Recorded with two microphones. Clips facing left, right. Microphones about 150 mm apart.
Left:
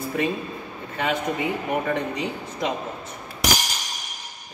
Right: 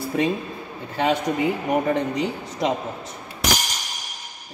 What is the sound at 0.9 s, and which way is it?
Speech, 30° right (ahead or behind).